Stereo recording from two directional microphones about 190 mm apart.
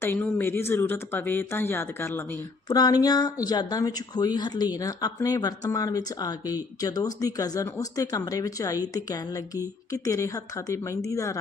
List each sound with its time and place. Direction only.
0.0 s speech: 10° left (ahead or behind)